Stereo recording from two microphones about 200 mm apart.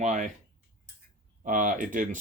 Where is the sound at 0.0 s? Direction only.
35° right (ahead or behind).